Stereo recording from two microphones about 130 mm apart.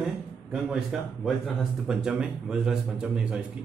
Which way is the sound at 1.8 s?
5° right (ahead or behind).